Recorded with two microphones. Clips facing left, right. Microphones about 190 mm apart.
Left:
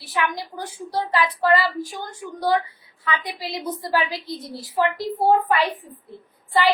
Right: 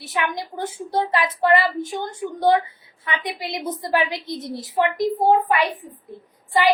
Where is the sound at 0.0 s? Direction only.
20° right (ahead or behind).